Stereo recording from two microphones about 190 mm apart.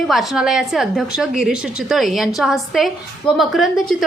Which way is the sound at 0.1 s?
Centre (ahead or behind).